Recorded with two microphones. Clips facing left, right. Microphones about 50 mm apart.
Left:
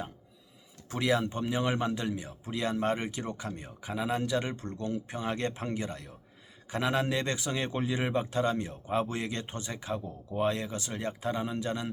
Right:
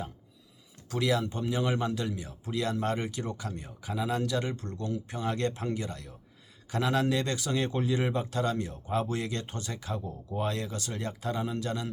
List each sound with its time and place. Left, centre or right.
0.9 s speech: left